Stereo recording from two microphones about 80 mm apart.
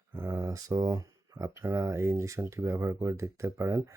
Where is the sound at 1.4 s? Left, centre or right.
Right.